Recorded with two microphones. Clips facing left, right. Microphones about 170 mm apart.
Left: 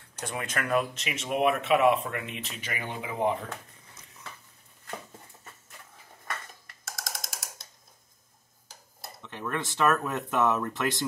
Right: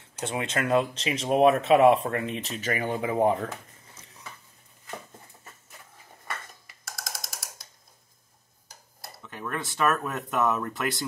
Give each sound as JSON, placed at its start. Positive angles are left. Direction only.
{"t": 0.2, "sound": "speech", "side_deg": -25}
{"t": 6.2, "sound": "a sound", "side_deg": 0}
{"t": 9.2, "sound": "speech", "side_deg": 0}